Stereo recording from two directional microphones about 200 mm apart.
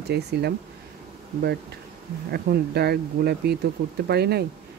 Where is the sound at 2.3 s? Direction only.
55° right (ahead or behind).